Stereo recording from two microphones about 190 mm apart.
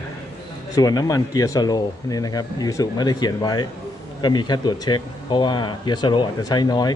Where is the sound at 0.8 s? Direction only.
20° left (ahead or behind).